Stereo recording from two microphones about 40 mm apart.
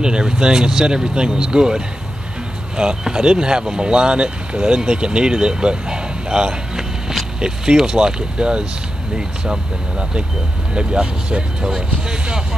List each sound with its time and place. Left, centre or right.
0.0 s speech: right
3.0 s speech: right